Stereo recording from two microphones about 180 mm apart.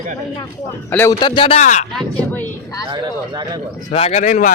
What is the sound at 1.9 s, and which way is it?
Speech, 10° left (ahead or behind).